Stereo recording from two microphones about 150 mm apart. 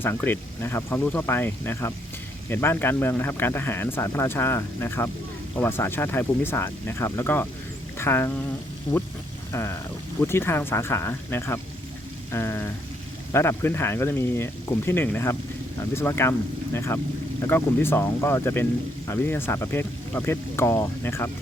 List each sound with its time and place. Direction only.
0.0 s speech: 15° left (ahead or behind)
9.5 s speech: 20° left (ahead or behind)